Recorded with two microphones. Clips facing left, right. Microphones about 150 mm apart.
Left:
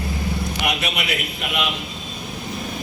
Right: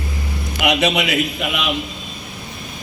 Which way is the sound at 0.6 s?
80° right.